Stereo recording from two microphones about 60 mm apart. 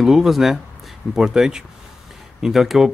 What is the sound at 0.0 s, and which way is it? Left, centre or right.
Speech, centre.